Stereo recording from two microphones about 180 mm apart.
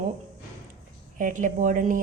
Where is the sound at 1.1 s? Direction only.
45° right (ahead or behind).